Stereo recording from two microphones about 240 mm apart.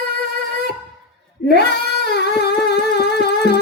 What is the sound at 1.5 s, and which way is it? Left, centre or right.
Singing, left.